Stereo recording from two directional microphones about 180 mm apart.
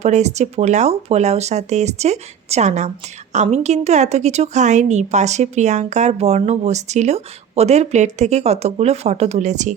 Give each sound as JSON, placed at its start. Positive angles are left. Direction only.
{"t": 0.0, "sound": "a woman's voice", "side_deg": -40}